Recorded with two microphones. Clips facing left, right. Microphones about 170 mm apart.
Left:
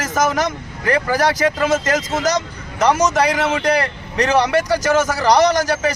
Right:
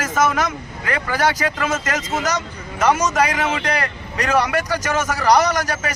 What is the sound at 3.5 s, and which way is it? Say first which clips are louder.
A man's voice: left 5 dB; 30° left (ahead or behind).